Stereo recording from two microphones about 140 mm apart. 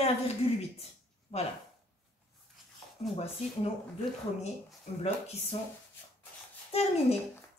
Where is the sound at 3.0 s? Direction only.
50° left (ahead or behind).